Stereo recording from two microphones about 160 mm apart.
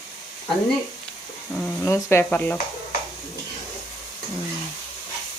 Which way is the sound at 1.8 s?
15° left (ahead or behind).